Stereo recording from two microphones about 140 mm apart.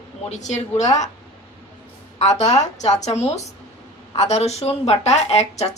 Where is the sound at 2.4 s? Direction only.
55° left (ahead or behind).